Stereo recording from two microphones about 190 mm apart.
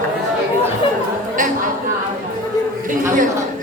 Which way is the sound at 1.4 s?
45° right (ahead or behind).